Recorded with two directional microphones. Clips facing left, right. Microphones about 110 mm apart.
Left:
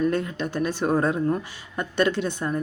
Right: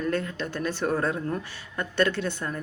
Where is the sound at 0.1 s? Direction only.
15° left (ahead or behind).